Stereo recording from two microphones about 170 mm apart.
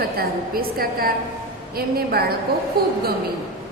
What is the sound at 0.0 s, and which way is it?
A woman's voice, 60° right (ahead or behind).